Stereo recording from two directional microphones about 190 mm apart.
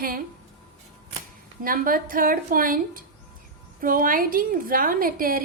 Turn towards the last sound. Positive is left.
turn(degrees=-50)  # may be behind; listen again after turning